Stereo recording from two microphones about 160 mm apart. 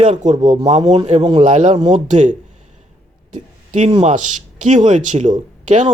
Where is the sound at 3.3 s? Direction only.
50° right (ahead or behind).